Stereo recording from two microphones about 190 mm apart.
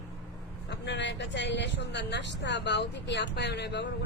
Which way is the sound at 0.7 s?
65° left (ahead or behind).